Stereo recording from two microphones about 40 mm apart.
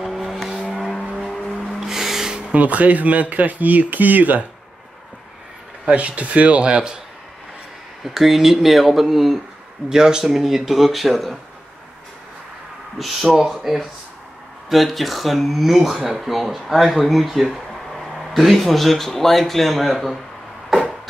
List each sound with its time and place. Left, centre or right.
0.0 s vehicle: centre
1.3 s car: centre
1.8 s a sound: centre
2.5 s speech: right
5.9 s speech: right
8.0 s speech: centre
9.8 s speech: centre
12.9 s speech: centre